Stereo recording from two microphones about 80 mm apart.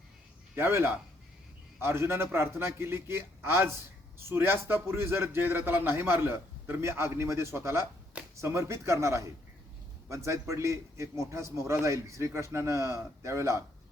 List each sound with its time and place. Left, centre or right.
0.5 s a man's voice: right